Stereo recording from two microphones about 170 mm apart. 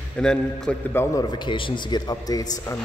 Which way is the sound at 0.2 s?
5° left (ahead or behind).